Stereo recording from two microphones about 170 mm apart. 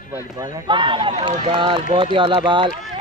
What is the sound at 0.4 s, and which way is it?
Speech, 25° right (ahead or behind).